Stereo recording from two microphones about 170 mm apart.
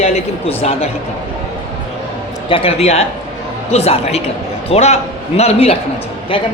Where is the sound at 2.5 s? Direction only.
35° left (ahead or behind).